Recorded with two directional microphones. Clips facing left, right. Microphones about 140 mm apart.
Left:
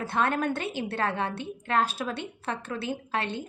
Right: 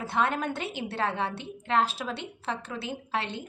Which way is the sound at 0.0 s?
20° right (ahead or behind).